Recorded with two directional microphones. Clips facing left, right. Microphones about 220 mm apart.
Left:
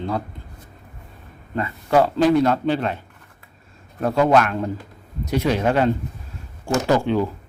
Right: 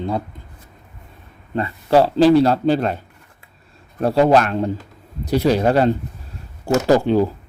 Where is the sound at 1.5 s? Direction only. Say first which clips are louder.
Right 3 dB; 30° right (ahead or behind).